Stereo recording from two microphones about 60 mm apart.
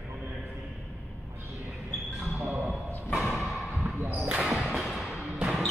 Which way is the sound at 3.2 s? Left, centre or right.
Centre.